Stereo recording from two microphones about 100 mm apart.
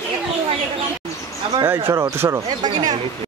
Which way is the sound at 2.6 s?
45° right (ahead or behind).